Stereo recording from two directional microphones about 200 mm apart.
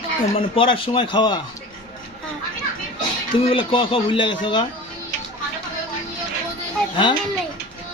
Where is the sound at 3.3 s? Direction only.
30° left (ahead or behind).